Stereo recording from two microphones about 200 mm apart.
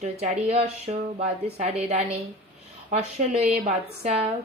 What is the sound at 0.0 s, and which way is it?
Speech, 30° right (ahead or behind).